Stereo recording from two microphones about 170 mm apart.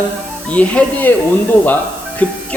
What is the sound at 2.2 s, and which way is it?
Speech, 10° left (ahead or behind).